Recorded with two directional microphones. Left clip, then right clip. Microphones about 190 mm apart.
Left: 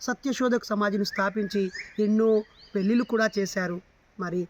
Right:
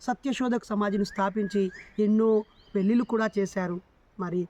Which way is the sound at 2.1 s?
15° right (ahead or behind).